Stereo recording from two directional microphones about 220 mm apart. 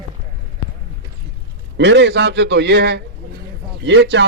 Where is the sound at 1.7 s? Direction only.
50° right (ahead or behind).